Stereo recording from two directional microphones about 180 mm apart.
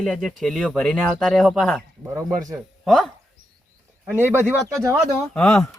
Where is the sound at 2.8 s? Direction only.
Centre (ahead or behind).